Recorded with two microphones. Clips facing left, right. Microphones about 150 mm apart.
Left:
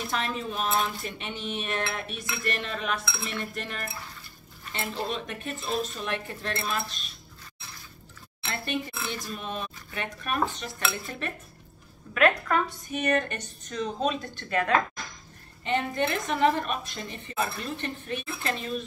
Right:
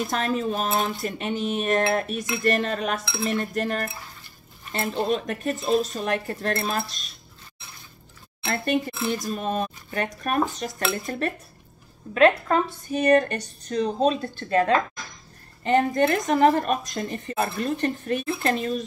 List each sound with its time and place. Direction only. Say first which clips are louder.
0.0 s a woman's voice: right 6 dB; 45° right (ahead or behind)
5.0 s speech: right 8 dB; 40° right (ahead or behind)
8.5 s a woman's voice: right 7 dB; 40° right (ahead or behind)
15.6 s a woman's voice: right 7 dB; 45° right (ahead or behind)